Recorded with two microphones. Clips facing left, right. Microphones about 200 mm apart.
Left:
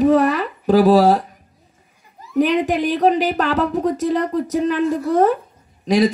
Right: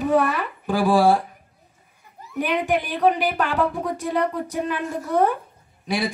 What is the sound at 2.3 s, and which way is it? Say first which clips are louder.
A man's voice: left 6 dB; 40° left (ahead or behind).